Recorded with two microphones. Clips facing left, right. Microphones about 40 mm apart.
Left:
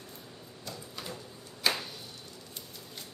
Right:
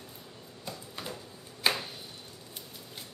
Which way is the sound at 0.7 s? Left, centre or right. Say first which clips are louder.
Right 1 dB; centre.